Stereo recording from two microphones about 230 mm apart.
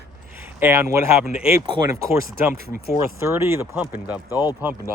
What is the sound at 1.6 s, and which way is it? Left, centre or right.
Speech, centre.